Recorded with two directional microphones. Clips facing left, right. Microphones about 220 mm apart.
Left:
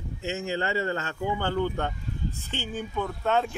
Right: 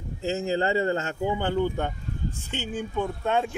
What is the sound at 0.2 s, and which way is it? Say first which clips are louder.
Speech: right 4 dB; 35° right (ahead or behind).